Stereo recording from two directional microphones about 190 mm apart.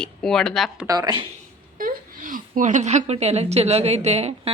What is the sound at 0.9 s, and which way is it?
Speech, 20° right (ahead or behind).